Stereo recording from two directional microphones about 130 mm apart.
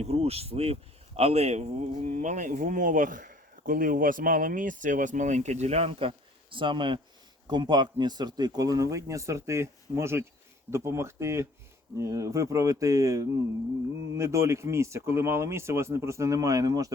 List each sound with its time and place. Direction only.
0.0 s speech: 50° right (ahead or behind); by 16.9 s 25° right (ahead or behind)